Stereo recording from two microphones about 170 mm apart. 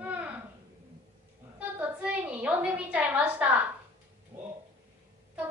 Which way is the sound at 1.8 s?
10° right (ahead or behind).